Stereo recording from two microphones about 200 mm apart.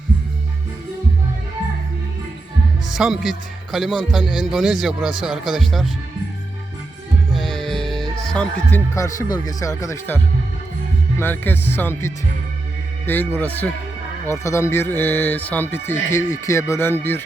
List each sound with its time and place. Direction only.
2.9 s speech: centre (ahead or behind)
7.3 s music: centre (ahead or behind)
9.3 s speech: 20° left (ahead or behind)
11.2 s speech: 10° left (ahead or behind)